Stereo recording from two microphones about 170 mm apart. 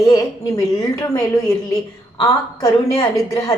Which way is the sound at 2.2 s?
20° left (ahead or behind).